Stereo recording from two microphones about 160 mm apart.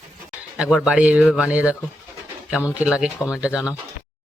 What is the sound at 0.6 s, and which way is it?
Speech, 5° right (ahead or behind).